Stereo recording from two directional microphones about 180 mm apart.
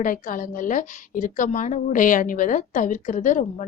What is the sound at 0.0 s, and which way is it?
A woman's voice, 50° left (ahead or behind).